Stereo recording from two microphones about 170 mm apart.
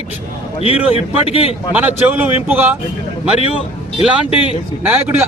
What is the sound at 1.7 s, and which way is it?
A man's voice, 10° right (ahead or behind).